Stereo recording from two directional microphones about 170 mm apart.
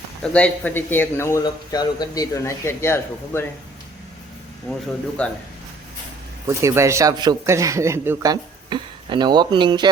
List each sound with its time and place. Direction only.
0.2 s a man's voice: 5° left (ahead or behind)
5.2 s a man's voice: 5° left (ahead or behind)
6.5 s a man's voice: 15° right (ahead or behind)